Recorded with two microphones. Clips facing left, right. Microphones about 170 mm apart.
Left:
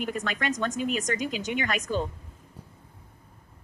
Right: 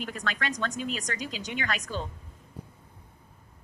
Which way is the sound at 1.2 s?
50° left (ahead or behind).